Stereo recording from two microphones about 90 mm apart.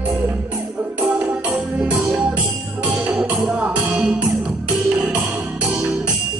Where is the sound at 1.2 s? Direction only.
15° right (ahead or behind).